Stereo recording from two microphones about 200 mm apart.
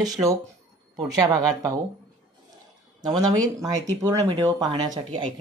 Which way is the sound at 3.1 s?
20° right (ahead or behind).